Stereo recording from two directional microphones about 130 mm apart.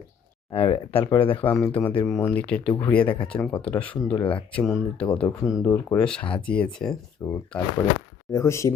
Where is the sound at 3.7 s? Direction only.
10° left (ahead or behind).